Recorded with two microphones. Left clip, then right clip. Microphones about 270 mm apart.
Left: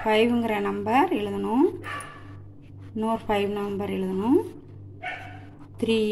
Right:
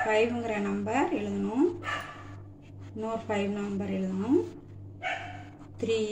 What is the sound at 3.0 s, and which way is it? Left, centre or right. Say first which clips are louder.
A woman's voice: left 6 dB; left.